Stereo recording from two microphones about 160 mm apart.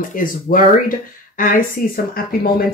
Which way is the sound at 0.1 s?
60° left (ahead or behind).